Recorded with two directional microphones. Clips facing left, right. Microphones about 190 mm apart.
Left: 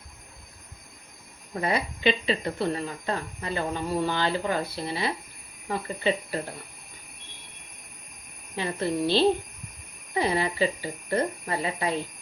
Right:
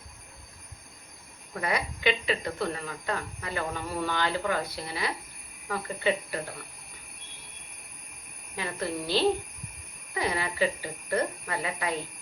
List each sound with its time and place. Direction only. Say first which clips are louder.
1.6 s speech: left 3 dB; 30° left (ahead or behind)
8.5 s speech: left 5 dB; 30° left (ahead or behind)